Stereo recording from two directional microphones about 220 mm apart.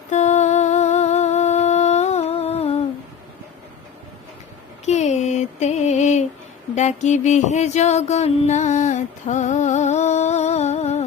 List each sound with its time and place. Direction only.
0.1 s humming: 30° left (ahead or behind)
4.9 s music: 30° left (ahead or behind)